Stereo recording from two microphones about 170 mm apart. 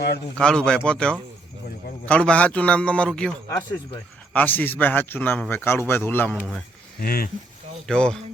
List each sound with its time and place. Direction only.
0.3 s a man's voice: 5° left (ahead or behind)
4.4 s a man's voice: 10° left (ahead or behind)
7.0 s speech: 60° left (ahead or behind)
7.9 s a man's voice: 5° left (ahead or behind)